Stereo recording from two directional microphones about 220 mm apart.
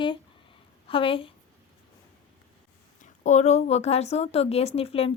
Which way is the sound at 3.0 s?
35° left (ahead or behind).